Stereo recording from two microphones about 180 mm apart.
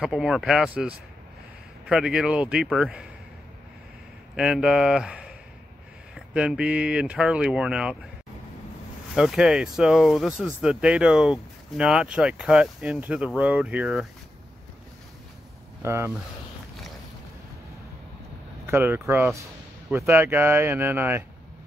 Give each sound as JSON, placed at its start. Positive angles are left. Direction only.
{"t": 0.0, "sound": "speech", "side_deg": -5}
{"t": 4.4, "sound": "speech", "side_deg": -5}
{"t": 9.1, "sound": "speech", "side_deg": -5}
{"t": 15.8, "sound": "speech", "side_deg": -15}
{"t": 18.7, "sound": "speech", "side_deg": -15}